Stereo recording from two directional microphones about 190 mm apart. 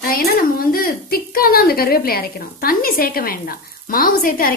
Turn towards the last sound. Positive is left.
turn(degrees=50)  # may be behind; listen again after turning